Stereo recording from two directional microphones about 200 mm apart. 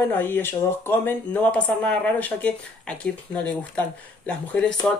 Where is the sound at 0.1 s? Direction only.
10° left (ahead or behind).